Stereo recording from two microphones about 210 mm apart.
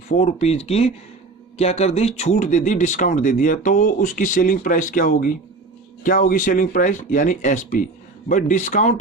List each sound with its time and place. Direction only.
0.1 s speech: 35° left (ahead or behind)